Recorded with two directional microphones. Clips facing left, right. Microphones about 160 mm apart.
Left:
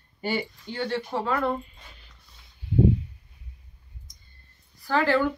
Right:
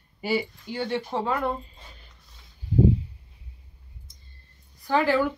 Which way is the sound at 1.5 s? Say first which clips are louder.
Left 4 dB; 30° right (ahead or behind).